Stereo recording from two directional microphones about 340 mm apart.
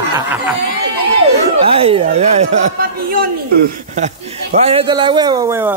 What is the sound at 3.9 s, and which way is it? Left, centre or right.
A man's voice, centre.